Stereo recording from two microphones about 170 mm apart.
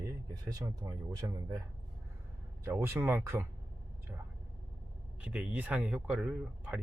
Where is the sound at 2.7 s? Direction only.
15° right (ahead or behind).